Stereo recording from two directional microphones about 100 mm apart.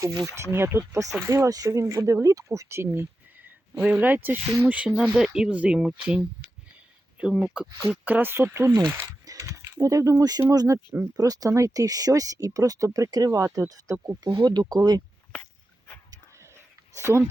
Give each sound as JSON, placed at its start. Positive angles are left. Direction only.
{"t": 0.3, "sound": "speech", "side_deg": -25}
{"t": 9.2, "sound": "mechanisms", "side_deg": -35}
{"t": 10.5, "sound": "speech", "side_deg": -40}
{"t": 13.9, "sound": "speech", "side_deg": -25}
{"t": 14.3, "sound": "speech", "side_deg": -45}